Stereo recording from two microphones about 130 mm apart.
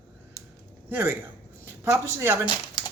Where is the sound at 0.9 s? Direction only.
20° right (ahead or behind).